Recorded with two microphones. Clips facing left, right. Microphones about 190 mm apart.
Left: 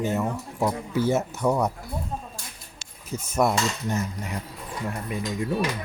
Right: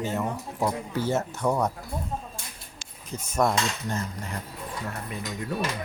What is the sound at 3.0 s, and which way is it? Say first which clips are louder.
Speech: left 2 dB; 10° left (ahead or behind).